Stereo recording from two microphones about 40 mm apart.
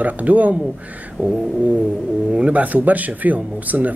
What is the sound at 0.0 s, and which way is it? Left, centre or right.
Speech, right.